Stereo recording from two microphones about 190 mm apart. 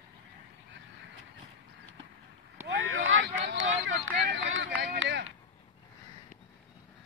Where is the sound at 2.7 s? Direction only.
80° right.